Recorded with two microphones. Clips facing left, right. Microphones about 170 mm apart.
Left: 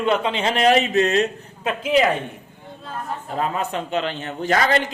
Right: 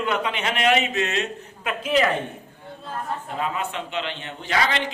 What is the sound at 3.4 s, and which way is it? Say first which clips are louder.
A man's voice: left 5 dB; 40° left (ahead or behind).